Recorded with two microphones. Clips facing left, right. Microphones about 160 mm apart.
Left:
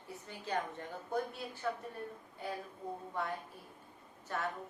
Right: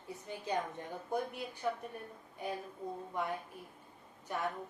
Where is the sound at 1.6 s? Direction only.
15° right (ahead or behind).